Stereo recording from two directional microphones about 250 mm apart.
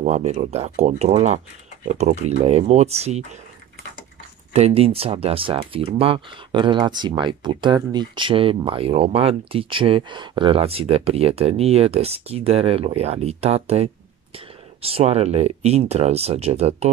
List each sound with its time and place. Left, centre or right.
0.0 s speech: right
4.5 s speech: right